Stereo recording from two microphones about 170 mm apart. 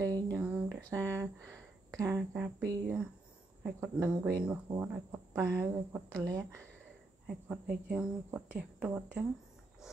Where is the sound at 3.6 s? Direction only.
10° right (ahead or behind).